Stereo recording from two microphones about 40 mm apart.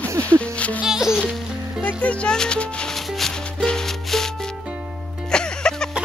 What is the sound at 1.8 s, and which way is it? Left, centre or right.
Speech, left.